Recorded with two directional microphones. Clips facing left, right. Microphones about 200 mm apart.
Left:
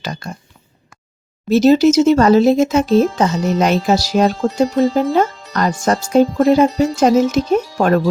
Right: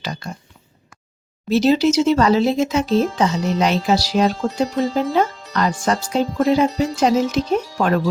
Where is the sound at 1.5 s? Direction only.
45° left (ahead or behind).